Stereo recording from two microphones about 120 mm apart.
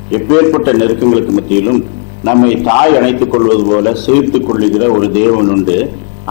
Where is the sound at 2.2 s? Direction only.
20° left (ahead or behind).